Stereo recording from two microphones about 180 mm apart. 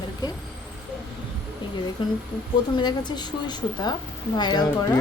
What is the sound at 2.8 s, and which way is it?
A woman's voice, 25° left (ahead or behind).